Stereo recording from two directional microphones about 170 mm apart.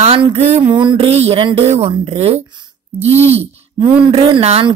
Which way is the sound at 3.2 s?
35° right (ahead or behind).